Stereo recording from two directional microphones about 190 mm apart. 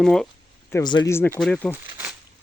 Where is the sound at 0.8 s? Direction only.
20° left (ahead or behind); by 1.8 s 5° left (ahead or behind).